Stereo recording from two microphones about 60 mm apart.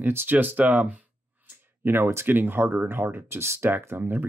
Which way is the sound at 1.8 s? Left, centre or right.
Right.